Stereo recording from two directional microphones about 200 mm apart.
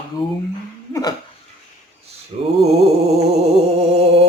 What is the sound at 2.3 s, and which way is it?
Mantra, 30° right (ahead or behind).